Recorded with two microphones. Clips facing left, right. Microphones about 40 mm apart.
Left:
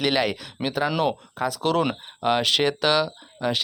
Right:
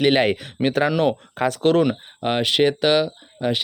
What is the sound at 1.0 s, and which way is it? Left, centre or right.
Speech, right.